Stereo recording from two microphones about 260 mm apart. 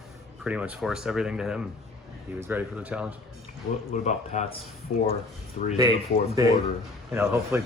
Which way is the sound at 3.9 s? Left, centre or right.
Left.